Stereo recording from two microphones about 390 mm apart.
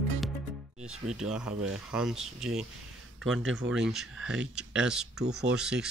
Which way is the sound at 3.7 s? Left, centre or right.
Centre.